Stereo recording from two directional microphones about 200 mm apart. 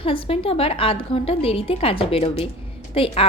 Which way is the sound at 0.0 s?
25° left (ahead or behind).